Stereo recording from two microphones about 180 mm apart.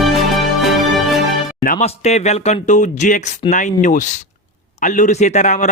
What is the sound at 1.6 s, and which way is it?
A man's voice, 40° left (ahead or behind).